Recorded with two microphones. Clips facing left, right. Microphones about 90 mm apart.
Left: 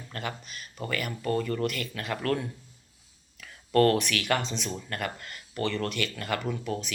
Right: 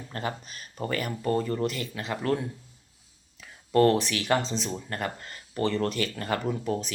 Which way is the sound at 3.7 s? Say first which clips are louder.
Right 1 dB; 20° right (ahead or behind).